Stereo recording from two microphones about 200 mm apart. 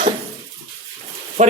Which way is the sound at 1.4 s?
40° right (ahead or behind).